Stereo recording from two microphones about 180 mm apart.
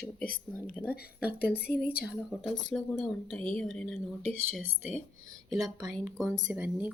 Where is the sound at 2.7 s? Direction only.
5° left (ahead or behind).